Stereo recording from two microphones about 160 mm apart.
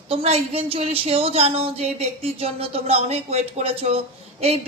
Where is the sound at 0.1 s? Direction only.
35° right (ahead or behind).